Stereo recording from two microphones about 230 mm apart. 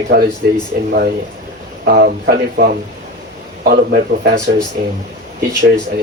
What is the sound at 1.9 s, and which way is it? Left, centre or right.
Speech, right.